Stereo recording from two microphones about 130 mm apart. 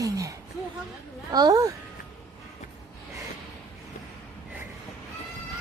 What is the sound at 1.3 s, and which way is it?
Speech, 30° right (ahead or behind).